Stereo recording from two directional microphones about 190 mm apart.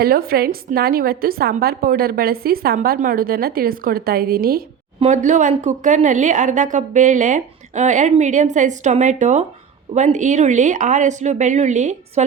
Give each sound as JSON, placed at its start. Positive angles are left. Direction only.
{"t": 0.0, "sound": "a woman's voice", "side_deg": -50}
{"t": 4.9, "sound": "speech", "side_deg": -35}